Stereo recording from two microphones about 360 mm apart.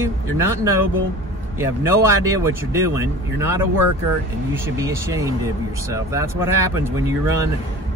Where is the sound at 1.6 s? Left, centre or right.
Centre.